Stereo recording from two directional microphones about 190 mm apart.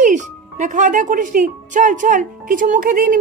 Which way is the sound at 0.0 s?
40° right (ahead or behind).